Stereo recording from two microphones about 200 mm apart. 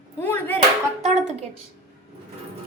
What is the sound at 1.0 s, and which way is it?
Speech, 35° right (ahead or behind).